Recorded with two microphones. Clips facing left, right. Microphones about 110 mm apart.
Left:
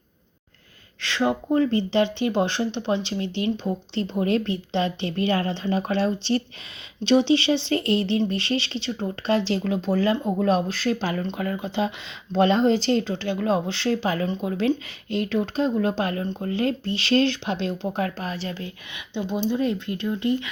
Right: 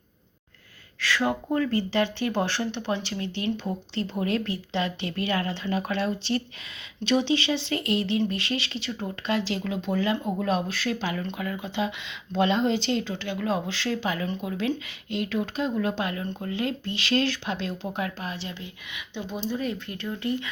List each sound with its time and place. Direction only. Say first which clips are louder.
0.9 s speech: left 2 dB; 25° left (ahead or behind); by 18.6 s 40° left (ahead or behind)
19.1 s speech: left 6 dB; 25° left (ahead or behind)